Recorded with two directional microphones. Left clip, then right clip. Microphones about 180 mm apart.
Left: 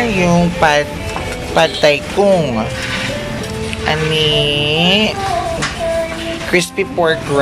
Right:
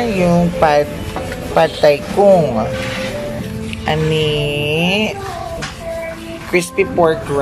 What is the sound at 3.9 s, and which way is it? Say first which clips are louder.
Speech: left 2 dB; 10° right (ahead or behind).